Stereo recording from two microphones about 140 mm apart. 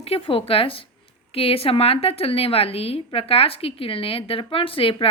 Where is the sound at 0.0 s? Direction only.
45° left (ahead or behind).